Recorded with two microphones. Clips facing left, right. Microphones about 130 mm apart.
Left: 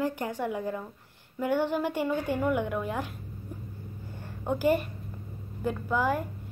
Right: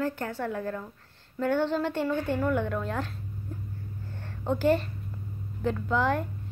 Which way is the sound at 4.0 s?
10° left (ahead or behind).